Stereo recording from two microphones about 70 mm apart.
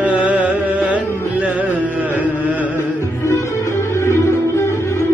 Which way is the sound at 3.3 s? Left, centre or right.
Left.